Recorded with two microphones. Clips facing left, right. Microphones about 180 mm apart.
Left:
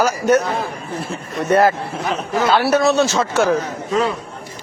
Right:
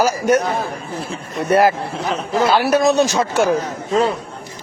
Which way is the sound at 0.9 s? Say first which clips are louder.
Left 3 dB; 5° left (ahead or behind).